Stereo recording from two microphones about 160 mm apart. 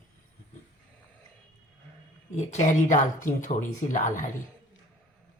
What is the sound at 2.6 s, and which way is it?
Speech, 50° left (ahead or behind).